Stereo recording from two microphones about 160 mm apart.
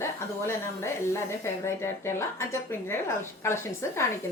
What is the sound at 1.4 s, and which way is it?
Speech, 15° left (ahead or behind).